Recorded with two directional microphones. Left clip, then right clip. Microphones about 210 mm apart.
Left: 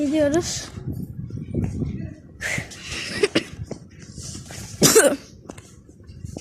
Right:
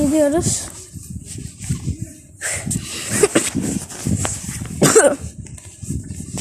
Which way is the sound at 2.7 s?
5° right (ahead or behind).